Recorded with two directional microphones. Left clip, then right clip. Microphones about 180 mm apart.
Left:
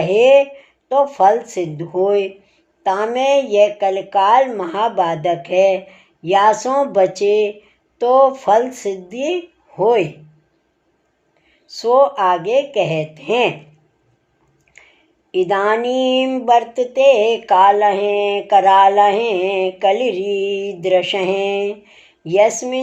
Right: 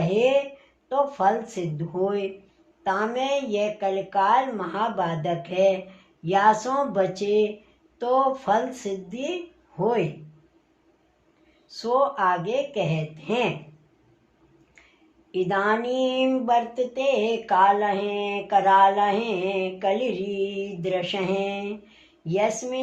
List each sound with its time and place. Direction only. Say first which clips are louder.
0.0 s speech: left 10 dB; 40° left (ahead or behind)
11.7 s speech: left 10 dB; 40° left (ahead or behind)
15.3 s speech: left 7 dB; 40° left (ahead or behind)